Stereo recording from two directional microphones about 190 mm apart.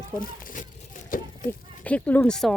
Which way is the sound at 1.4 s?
5° left (ahead or behind).